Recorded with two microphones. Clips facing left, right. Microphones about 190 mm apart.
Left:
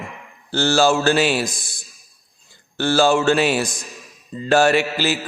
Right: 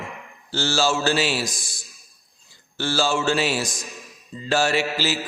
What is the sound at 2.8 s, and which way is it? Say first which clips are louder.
A man's voice: left 6 dB; 55° left (ahead or behind).